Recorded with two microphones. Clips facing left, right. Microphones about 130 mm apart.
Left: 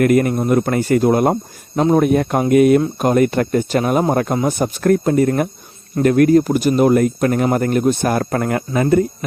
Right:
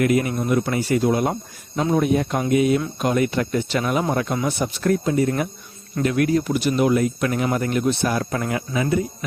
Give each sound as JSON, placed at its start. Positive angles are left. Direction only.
{"t": 0.0, "sound": "speech", "side_deg": 50}